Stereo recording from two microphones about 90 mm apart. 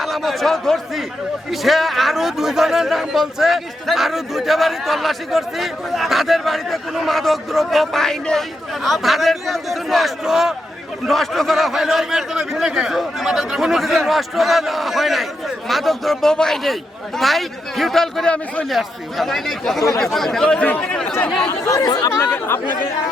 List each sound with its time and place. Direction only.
0.0 s a man's voice: centre (ahead or behind)
21.5 s speech: 45° left (ahead or behind)
22.2 s speech: 25° left (ahead or behind)